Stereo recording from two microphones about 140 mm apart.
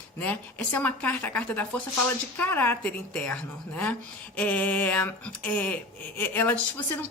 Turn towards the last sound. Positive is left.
turn(degrees=15)  # may be behind; listen again after turning